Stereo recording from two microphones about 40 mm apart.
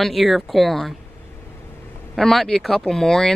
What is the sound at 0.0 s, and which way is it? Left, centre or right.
Speech, centre.